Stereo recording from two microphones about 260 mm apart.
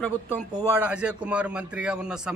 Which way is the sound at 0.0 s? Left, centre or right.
Centre.